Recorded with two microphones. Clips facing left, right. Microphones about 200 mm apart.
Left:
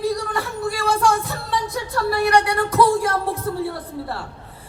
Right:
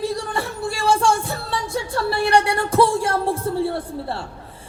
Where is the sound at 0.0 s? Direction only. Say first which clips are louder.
Left 1 dB; 30° right (ahead or behind).